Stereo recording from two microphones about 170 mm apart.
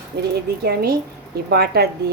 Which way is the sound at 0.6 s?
65° right (ahead or behind).